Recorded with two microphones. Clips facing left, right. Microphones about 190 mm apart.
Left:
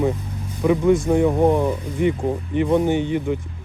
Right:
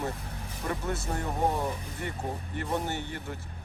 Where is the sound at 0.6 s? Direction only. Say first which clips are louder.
Left 17 dB; 90° left.